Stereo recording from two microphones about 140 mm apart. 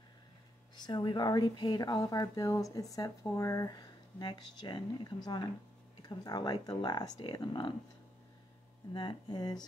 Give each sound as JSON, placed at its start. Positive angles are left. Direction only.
{"t": 0.7, "sound": "speech", "side_deg": 30}
{"t": 8.9, "sound": "speech", "side_deg": 35}